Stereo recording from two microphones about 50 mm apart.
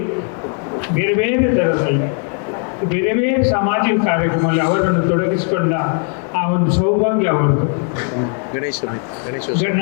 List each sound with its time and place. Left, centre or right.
0.9 s a man's voice: left
8.1 s a sound: left
9.5 s a man's voice: left